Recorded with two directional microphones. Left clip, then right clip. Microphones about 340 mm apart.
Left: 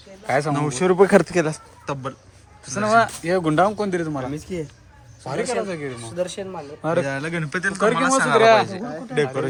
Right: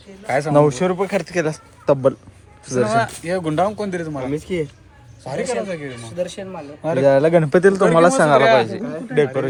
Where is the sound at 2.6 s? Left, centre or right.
Left.